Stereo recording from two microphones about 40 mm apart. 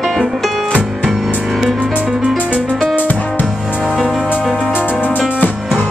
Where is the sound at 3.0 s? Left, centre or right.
Left.